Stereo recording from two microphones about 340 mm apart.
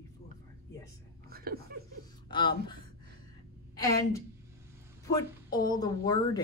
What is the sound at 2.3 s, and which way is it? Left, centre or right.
Speech, centre.